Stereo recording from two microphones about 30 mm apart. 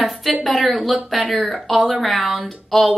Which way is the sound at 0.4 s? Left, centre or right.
Centre.